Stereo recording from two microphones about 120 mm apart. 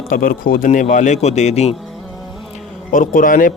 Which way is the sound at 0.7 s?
90° left.